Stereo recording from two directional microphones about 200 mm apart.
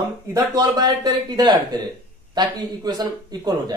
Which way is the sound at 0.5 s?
20° right (ahead or behind).